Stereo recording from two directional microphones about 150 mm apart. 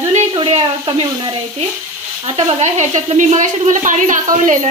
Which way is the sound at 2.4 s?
50° right (ahead or behind).